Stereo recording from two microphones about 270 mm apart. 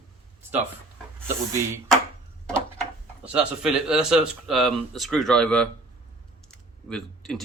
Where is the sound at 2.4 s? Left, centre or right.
Centre.